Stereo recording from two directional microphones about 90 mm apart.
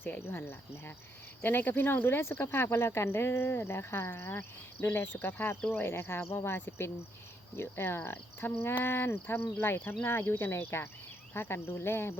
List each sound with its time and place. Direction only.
0.0 s speech: 20° left (ahead or behind)